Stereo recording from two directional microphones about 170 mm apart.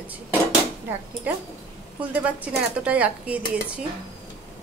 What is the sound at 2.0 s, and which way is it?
Speech, 10° right (ahead or behind).